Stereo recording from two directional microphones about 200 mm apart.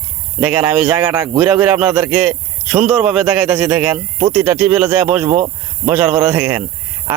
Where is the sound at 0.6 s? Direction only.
10° right (ahead or behind).